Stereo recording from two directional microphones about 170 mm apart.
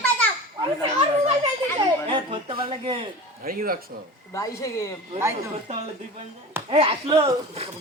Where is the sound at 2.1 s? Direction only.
30° right (ahead or behind).